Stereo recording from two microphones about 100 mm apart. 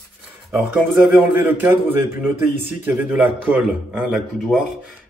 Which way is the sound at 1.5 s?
20° right (ahead or behind).